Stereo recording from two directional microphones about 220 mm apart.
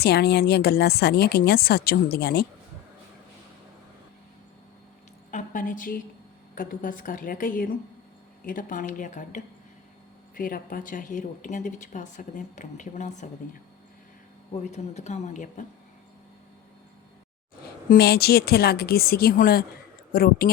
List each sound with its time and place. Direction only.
0.0 s speech: 50° left (ahead or behind)
5.3 s a sound: 35° left (ahead or behind)
6.6 s speech: 40° left (ahead or behind)
17.8 s speech: 45° left (ahead or behind)